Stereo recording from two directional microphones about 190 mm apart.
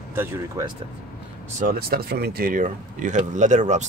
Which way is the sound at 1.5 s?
50° right (ahead or behind).